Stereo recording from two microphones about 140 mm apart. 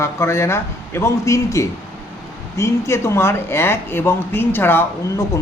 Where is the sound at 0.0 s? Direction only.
20° left (ahead or behind).